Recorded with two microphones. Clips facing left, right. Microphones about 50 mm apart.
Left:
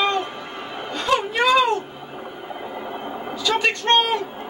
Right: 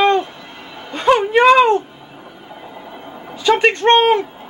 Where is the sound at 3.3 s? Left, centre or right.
Right.